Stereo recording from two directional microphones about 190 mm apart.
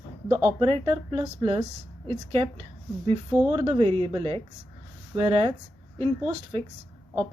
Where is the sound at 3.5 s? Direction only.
30° right (ahead or behind).